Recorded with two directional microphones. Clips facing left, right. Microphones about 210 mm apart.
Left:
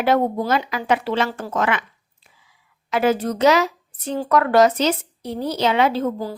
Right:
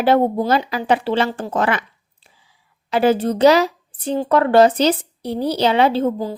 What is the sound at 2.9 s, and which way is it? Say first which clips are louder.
A woman's voice: right 3 dB; 30° right (ahead or behind).